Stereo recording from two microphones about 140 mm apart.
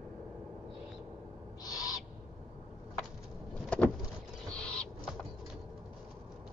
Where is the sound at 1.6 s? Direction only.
25° left (ahead or behind).